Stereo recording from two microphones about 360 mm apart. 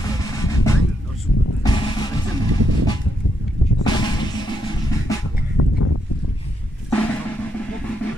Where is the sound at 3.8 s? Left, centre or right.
Centre.